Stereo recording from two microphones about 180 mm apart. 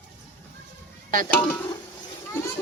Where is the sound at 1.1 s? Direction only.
50° right (ahead or behind).